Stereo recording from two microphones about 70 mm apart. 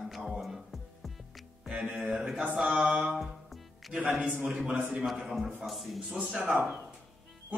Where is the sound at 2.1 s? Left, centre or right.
Centre.